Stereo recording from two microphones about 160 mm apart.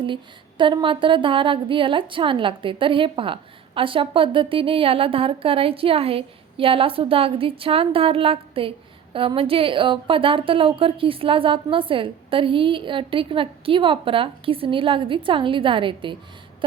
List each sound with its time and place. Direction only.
0.0 s speech: 30° right (ahead or behind)